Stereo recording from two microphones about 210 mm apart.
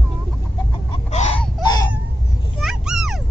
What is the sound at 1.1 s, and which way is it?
Whimper, 35° left (ahead or behind).